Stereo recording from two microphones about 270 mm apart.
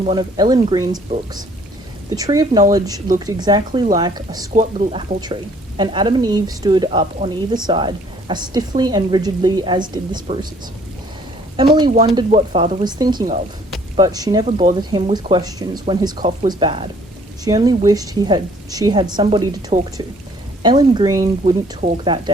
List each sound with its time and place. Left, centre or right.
0.0 s speech: centre
2.1 s speech: centre
11.5 s speech: centre